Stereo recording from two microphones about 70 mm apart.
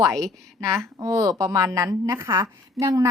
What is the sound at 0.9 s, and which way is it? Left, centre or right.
A woman's voice, right.